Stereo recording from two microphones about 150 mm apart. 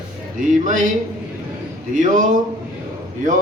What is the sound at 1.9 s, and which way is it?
Speech, 60° right (ahead or behind).